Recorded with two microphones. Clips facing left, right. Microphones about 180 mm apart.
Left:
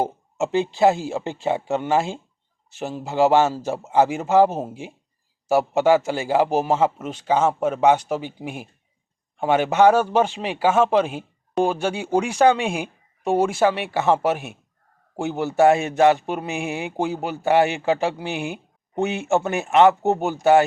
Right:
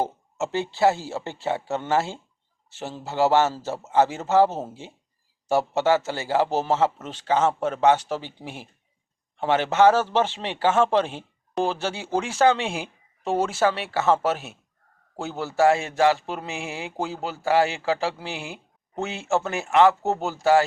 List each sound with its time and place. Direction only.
0.0 s a man's voice: 15° left (ahead or behind)